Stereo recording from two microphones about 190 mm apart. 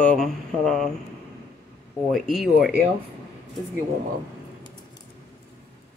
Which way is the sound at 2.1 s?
Centre (ahead or behind).